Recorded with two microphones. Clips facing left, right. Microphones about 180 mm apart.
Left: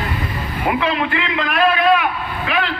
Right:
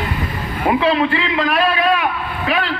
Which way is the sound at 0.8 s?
35° right (ahead or behind).